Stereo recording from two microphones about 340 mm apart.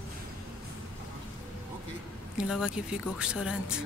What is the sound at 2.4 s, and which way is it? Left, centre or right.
Speech, centre.